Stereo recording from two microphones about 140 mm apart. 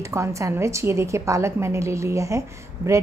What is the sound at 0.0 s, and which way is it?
A woman's voice, 20° right (ahead or behind).